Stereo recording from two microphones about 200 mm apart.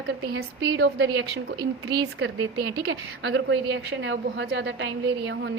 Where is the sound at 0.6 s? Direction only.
60° right (ahead or behind).